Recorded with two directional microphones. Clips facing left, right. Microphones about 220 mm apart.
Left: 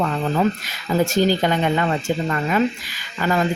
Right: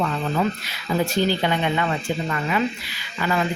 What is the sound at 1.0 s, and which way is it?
A man's voice, 45° left (ahead or behind).